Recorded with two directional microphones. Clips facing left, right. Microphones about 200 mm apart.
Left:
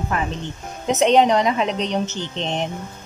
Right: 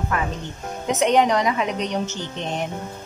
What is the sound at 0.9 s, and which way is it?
Speech, 25° left (ahead or behind).